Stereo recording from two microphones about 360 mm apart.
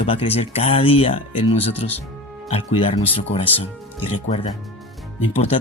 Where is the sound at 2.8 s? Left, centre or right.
Centre.